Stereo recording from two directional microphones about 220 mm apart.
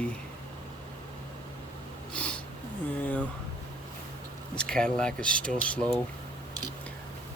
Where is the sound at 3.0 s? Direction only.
5° left (ahead or behind).